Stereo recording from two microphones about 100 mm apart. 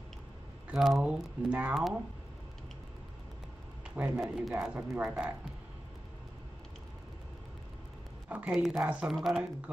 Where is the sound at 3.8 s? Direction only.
15° right (ahead or behind).